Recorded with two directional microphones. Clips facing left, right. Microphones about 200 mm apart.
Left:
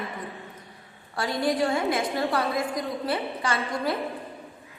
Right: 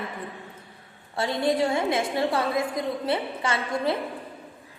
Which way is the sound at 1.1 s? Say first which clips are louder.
Right 1 dB; 25° right (ahead or behind).